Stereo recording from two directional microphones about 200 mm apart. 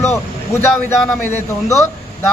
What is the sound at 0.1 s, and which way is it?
Speech, 10° left (ahead or behind).